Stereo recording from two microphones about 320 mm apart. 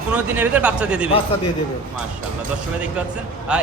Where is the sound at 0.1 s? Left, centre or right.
Centre.